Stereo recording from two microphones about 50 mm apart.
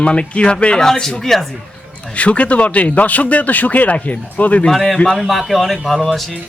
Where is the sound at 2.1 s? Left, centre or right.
Left.